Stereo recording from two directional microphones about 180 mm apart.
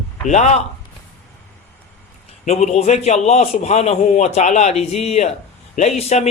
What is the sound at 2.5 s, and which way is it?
Speech, 40° left (ahead or behind).